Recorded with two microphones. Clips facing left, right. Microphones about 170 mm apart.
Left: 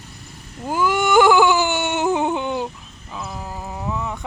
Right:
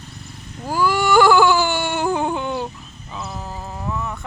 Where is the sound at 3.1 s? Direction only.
Centre (ahead or behind).